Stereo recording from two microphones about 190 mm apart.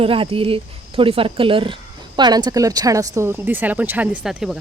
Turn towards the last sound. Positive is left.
turn(degrees=0)  # may be behind; listen again after turning